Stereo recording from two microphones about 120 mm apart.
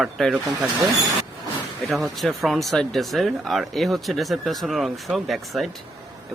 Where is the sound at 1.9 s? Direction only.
Centre (ahead or behind).